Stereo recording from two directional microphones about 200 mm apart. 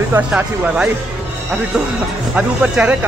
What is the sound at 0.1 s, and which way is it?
Speech, 5° right (ahead or behind).